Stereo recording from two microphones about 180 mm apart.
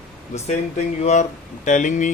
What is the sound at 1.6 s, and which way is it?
Speech, 45° left (ahead or behind).